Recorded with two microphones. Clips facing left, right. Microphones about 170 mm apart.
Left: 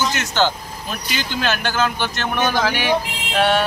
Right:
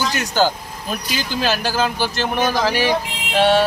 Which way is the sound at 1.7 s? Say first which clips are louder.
Right 1 dB; 35° right (ahead or behind).